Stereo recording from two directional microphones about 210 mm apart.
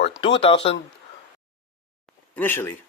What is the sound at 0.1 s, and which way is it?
Speech, 25° left (ahead or behind).